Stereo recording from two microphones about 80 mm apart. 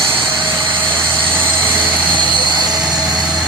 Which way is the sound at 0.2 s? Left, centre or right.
Right.